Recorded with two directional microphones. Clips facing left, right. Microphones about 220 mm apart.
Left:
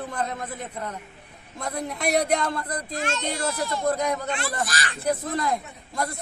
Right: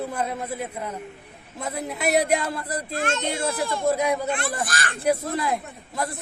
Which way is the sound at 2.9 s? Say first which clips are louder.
Right 3 dB; 55° right (ahead or behind).